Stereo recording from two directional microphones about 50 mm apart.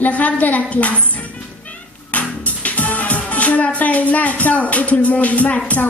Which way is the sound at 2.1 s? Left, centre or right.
Left.